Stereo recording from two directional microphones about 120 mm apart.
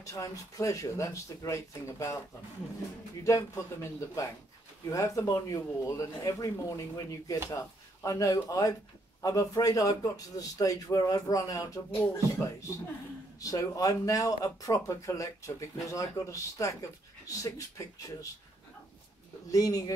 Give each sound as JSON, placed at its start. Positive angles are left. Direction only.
{"t": 0.0, "sound": "speech", "side_deg": 25}
{"t": 3.3, "sound": "speech", "side_deg": 20}
{"t": 19.5, "sound": "speech", "side_deg": 30}